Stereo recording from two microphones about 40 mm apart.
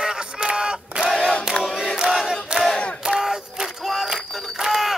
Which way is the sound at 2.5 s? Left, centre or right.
Centre.